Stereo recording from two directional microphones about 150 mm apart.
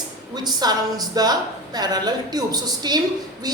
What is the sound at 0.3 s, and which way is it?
A woman's voice, 25° right (ahead or behind).